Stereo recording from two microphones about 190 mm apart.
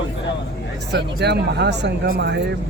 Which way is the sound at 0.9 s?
65° right (ahead or behind).